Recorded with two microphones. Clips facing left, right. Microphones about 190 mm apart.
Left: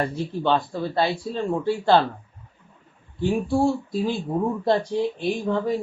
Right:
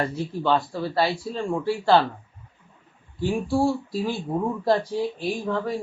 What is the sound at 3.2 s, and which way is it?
Speech, 20° left (ahead or behind).